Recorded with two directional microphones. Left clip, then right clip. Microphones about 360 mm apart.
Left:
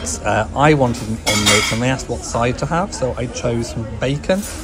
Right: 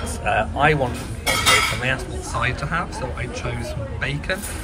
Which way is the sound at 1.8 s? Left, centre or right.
Centre.